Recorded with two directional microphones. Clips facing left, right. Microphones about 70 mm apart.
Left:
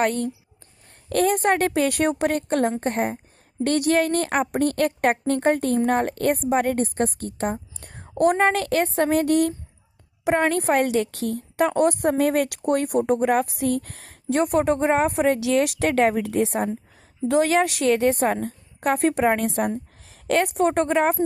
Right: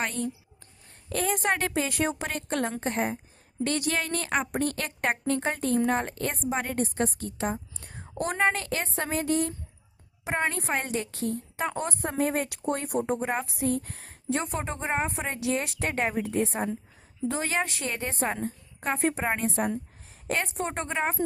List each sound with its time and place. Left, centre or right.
0.0 s a woman's voice: left
7.8 s whispering: left
8.2 s a woman's voice: left
20.1 s a woman's voice: left